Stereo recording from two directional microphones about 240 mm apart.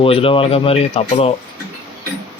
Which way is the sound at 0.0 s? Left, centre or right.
Left.